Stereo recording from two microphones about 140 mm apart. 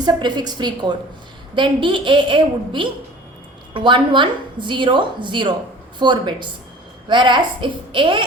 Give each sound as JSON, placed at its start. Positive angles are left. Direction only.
{"t": 0.0, "sound": "a woman's voice", "side_deg": -30}